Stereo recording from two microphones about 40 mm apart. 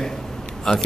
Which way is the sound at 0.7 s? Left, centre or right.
Centre.